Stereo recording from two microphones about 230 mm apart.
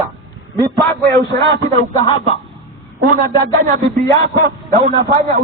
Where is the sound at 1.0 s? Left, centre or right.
Centre.